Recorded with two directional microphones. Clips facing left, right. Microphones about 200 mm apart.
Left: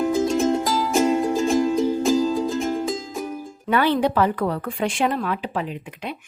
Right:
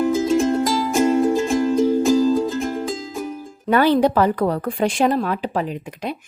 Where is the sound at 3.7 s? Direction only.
40° right (ahead or behind).